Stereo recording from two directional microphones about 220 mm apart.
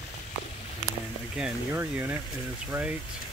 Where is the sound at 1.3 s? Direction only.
5° right (ahead or behind).